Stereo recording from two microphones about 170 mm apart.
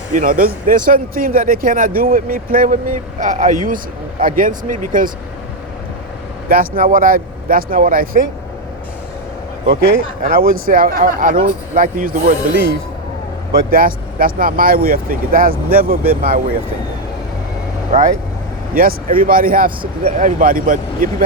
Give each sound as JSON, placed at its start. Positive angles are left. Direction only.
{"t": 0.1, "sound": "speech", "side_deg": -50}
{"t": 6.5, "sound": "speech", "side_deg": -55}
{"t": 9.6, "sound": "speech", "side_deg": -60}
{"t": 13.5, "sound": "speech", "side_deg": -60}
{"t": 17.9, "sound": "speech", "side_deg": -40}
{"t": 18.7, "sound": "speech", "side_deg": -55}